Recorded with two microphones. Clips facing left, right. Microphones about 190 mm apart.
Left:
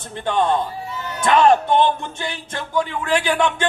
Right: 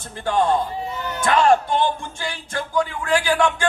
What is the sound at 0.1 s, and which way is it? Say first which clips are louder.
A man's voice: even; 20° left (ahead or behind).